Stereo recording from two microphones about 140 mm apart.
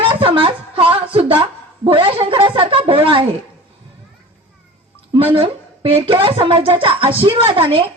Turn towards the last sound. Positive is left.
turn(degrees=-40)  # may be behind; listen again after turning